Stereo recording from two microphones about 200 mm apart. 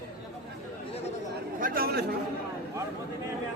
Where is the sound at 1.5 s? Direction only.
45° right (ahead or behind).